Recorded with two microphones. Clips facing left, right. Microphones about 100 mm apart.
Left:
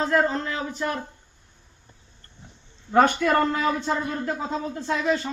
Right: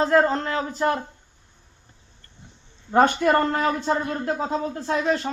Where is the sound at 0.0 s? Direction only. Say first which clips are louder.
Right 3 dB; 35° right (ahead or behind).